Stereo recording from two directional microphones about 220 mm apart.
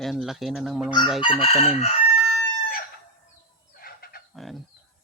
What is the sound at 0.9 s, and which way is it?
Chicken, 20° left (ahead or behind).